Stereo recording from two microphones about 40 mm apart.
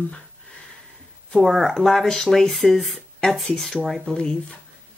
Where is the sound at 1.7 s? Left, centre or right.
Centre.